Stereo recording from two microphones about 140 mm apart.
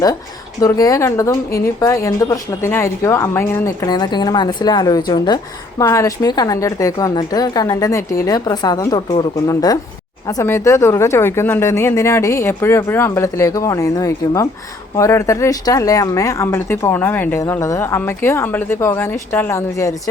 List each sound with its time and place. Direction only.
0.6 s speech: 25° left (ahead or behind)
3.8 s a woman's voice: 30° left (ahead or behind)